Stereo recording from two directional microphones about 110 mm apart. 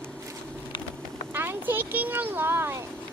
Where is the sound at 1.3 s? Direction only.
20° right (ahead or behind).